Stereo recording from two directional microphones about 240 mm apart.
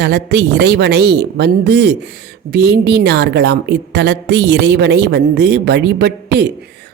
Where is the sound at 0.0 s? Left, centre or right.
Right.